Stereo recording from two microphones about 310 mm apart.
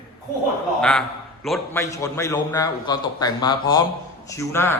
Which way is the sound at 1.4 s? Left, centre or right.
Centre.